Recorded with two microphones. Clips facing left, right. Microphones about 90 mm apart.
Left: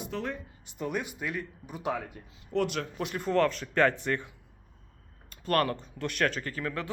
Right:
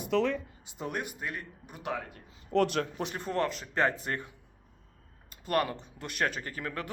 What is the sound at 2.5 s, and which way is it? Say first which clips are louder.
Speech: right 2 dB; 40° right (ahead or behind).